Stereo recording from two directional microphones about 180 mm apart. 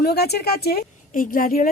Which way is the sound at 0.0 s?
60° left (ahead or behind).